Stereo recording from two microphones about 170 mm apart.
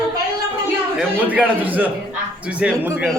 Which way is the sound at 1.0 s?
10° right (ahead or behind).